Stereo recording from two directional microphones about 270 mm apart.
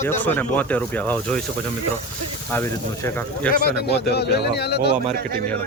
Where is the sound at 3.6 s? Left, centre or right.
Left.